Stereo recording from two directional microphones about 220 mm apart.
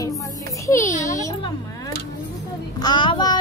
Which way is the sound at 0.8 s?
35° left (ahead or behind).